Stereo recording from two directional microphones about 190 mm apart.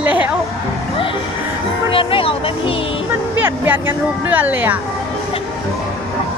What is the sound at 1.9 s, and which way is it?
Speech, 30° left (ahead or behind).